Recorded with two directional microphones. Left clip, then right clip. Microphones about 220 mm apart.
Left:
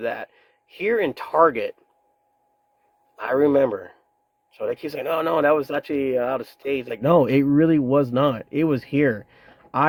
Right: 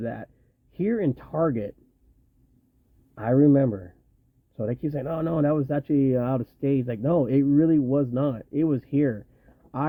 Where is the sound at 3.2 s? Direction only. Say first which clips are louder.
Left 2 dB; 15° left (ahead or behind).